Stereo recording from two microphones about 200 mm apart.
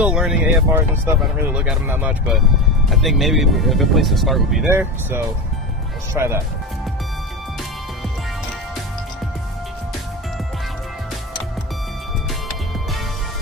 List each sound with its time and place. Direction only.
0.0 s speech: 5° right (ahead or behind)
4.6 s speech: 10° right (ahead or behind)